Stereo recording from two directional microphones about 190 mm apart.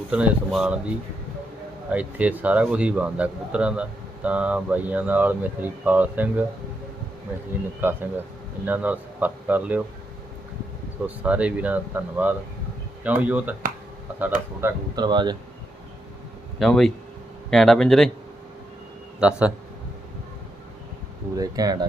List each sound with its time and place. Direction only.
0.1 s speech: 5° right (ahead or behind)
1.9 s speech: 5° right (ahead or behind)
7.8 s speech: 10° right (ahead or behind)
11.0 s speech: 5° right (ahead or behind)
14.6 s speech: 20° right (ahead or behind)
16.6 s speech: centre (ahead or behind)
19.2 s speech: 5° right (ahead or behind)
21.3 s speech: 20° right (ahead or behind)